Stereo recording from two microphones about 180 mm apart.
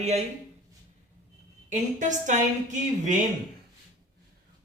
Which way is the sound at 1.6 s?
45° right (ahead or behind).